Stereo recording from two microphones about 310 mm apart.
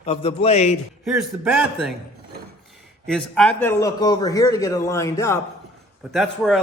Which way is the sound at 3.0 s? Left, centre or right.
Centre.